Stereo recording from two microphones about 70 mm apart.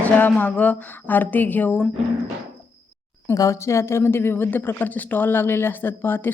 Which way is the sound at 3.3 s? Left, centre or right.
Left.